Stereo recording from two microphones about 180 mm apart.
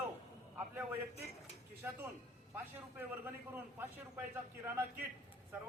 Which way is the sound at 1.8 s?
10° right (ahead or behind).